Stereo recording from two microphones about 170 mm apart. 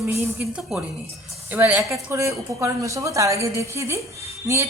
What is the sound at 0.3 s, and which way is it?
A woman's voice, centre (ahead or behind).